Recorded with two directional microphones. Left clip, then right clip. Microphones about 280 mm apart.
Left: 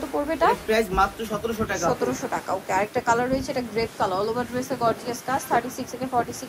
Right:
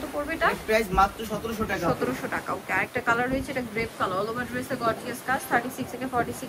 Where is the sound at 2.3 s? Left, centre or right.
Centre.